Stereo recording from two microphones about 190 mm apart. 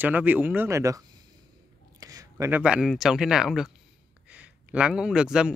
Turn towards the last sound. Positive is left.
turn(degrees=-5)  # may be behind; listen again after turning